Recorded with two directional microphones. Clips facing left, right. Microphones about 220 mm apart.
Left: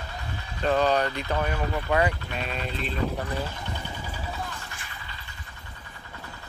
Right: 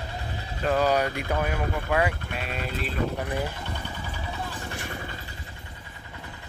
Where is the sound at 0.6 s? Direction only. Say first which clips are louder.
Even; 5° right (ahead or behind).